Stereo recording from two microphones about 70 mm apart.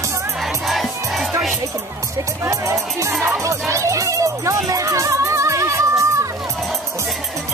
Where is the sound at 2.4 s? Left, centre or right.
Right.